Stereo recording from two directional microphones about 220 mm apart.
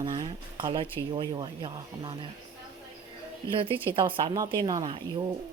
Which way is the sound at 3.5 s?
25° right (ahead or behind).